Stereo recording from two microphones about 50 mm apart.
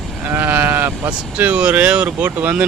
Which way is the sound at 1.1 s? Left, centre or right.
Right.